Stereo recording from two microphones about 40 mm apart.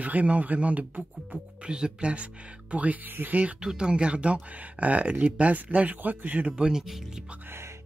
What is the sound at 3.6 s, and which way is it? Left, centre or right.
Speech, right.